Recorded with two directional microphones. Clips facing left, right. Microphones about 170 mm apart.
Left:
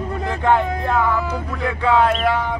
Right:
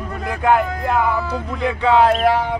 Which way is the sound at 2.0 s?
40° right (ahead or behind).